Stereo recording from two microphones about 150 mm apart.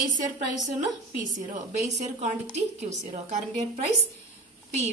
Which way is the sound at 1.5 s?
50° right (ahead or behind).